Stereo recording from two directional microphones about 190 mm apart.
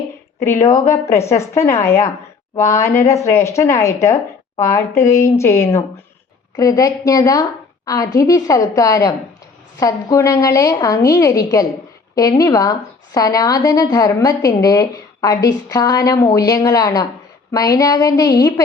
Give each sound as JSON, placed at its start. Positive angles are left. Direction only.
{"t": 0.4, "sound": "a woman's voice", "side_deg": 15}